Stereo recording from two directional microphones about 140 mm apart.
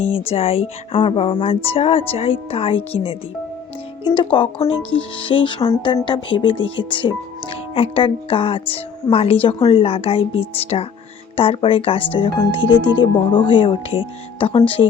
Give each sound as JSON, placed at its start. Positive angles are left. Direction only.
{"t": 0.3, "sound": "speech", "side_deg": 45}